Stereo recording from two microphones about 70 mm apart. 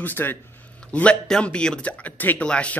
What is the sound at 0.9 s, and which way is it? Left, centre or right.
Speech, centre.